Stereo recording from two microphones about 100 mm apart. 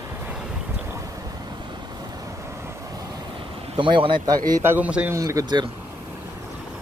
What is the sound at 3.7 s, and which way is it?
Speech, 55° right (ahead or behind).